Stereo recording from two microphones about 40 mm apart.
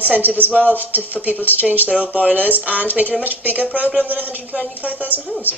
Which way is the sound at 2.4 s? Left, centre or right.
Right.